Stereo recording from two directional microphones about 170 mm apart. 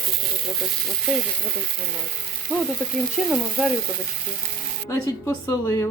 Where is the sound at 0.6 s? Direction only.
Centre (ahead or behind).